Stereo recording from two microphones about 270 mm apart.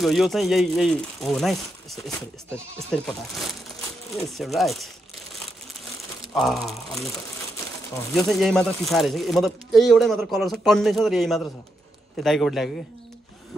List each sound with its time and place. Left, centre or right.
0.0 s speech: centre
6.3 s speech: centre
8.1 s speech: centre